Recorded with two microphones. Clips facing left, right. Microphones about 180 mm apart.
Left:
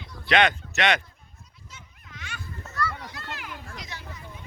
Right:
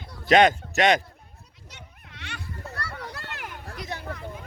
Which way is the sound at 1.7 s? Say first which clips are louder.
Right 2 dB; 70° right (ahead or behind).